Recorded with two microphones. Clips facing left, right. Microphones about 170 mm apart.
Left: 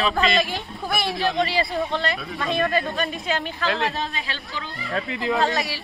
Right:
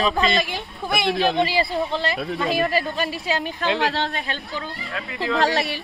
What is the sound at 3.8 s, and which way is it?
Speech, 70° right (ahead or behind).